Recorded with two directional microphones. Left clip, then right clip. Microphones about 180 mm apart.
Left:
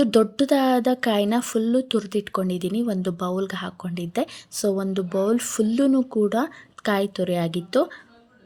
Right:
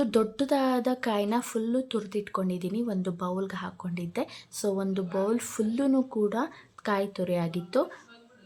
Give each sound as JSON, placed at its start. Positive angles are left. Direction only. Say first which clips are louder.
{"t": 0.0, "sound": "speech", "louder": "left 7 dB", "side_deg": 30}